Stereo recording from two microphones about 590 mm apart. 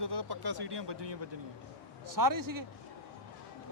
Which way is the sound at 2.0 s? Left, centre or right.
Right.